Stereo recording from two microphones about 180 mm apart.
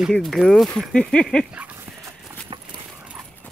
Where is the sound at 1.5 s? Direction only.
10° right (ahead or behind).